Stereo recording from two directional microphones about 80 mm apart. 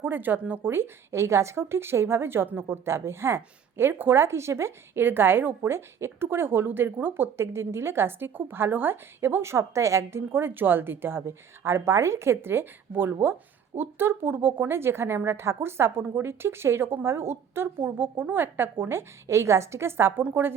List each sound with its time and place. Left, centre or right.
0.0 s a woman's voice: right